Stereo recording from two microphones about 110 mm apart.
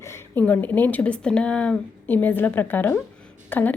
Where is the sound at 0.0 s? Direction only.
25° left (ahead or behind).